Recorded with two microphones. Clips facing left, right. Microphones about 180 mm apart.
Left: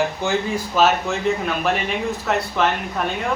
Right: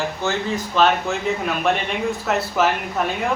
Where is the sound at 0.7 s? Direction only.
Centre (ahead or behind).